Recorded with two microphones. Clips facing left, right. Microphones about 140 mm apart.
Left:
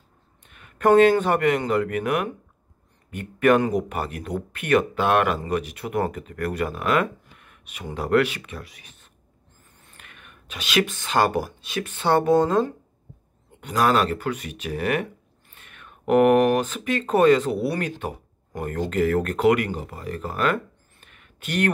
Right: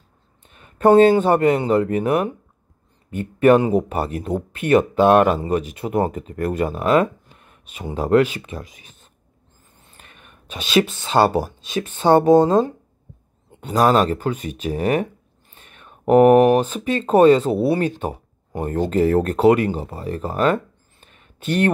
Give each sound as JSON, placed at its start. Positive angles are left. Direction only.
{"t": 0.5, "sound": "speech", "side_deg": -30}
{"t": 9.9, "sound": "whispering", "side_deg": -30}
{"t": 11.1, "sound": "speech", "side_deg": -30}